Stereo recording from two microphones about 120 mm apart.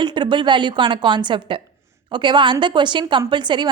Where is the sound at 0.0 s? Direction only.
40° right (ahead or behind).